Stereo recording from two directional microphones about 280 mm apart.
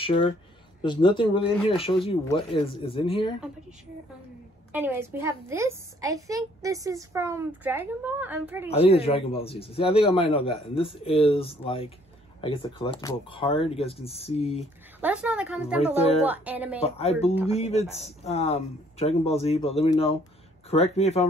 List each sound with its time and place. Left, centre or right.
0.0 s speech: centre
4.7 s a woman's voice: centre
8.6 s speech: left
15.0 s a woman's voice: centre
15.8 s speech: left
16.3 s a woman's voice: centre
16.8 s speech: left